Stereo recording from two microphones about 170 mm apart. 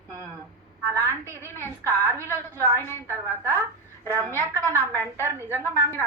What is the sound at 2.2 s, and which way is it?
Speech, 15° left (ahead or behind).